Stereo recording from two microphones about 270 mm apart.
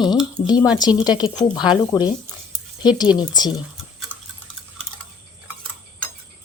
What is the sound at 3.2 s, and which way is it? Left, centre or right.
Speech, centre.